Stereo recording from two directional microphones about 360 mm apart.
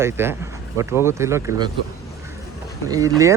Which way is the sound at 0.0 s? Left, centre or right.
Centre.